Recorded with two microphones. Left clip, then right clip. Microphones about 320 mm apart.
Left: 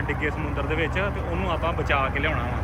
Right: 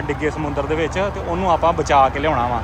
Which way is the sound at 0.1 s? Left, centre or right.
Centre.